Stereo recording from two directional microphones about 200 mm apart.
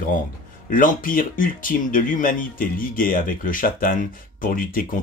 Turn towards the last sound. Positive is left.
turn(degrees=45)  # may be behind; listen again after turning